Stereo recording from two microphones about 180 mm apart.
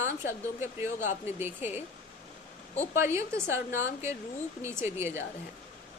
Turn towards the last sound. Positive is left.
turn(degrees=-15)  # may be behind; listen again after turning